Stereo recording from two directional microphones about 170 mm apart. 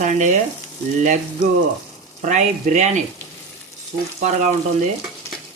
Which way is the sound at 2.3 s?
45° right (ahead or behind).